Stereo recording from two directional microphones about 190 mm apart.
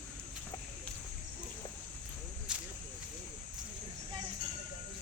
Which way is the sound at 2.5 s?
5° right (ahead or behind).